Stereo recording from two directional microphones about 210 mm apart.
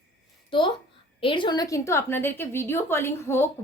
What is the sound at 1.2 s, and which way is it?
A woman's voice, 25° left (ahead or behind).